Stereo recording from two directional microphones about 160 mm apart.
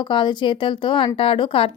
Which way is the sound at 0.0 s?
30° left (ahead or behind).